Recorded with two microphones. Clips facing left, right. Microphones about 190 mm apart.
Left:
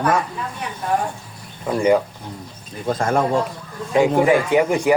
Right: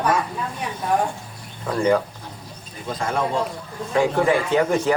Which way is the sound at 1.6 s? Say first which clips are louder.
Left 3 dB; 15° left (ahead or behind).